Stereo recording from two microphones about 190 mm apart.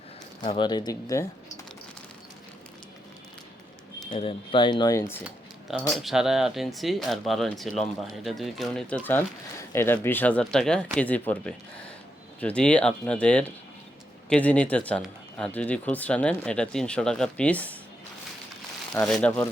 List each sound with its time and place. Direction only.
0.4 s speech: 25° left (ahead or behind)
4.1 s speech: 25° left (ahead or behind)
5.2 s speech: centre (ahead or behind)
19.0 s speech: 5° left (ahead or behind)